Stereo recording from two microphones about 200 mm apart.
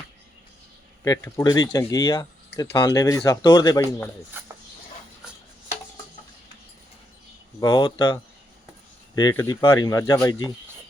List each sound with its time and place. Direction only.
1.0 s speech: 15° left (ahead or behind)
3.8 s speech: 10° left (ahead or behind)
4.4 s dog: 10° right (ahead or behind)
7.6 s speech: 20° left (ahead or behind)